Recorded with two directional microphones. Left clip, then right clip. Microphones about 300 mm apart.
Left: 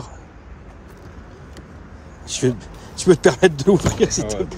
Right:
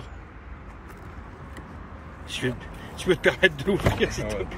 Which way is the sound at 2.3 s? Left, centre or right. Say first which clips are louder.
Left 8 dB; left.